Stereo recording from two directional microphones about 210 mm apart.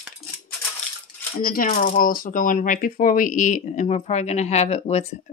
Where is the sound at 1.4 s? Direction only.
40° left (ahead or behind).